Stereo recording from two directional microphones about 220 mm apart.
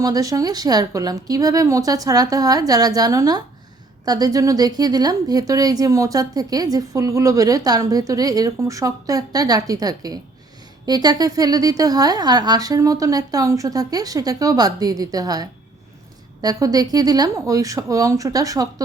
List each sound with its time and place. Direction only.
0.0 s a woman's voice: 15° right (ahead or behind)